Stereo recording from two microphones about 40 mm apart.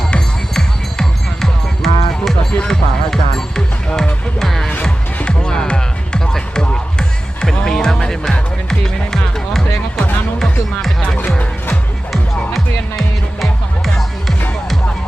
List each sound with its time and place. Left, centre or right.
0.5 s music: centre
2.6 s speech: centre
4.4 s music: centre
4.8 s music: left
10.4 s music: centre
11.7 s music: centre